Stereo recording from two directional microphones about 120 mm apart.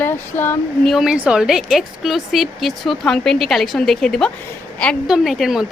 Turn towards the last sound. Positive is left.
turn(degrees=0)  # may be behind; listen again after turning